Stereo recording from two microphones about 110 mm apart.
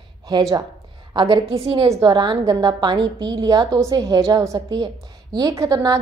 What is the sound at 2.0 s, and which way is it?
A woman's voice, 40° right (ahead or behind).